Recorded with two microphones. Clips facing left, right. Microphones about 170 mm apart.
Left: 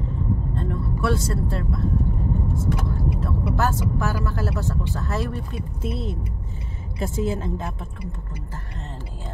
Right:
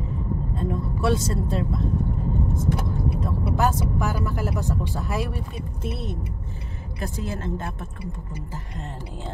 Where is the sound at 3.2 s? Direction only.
15° right (ahead or behind).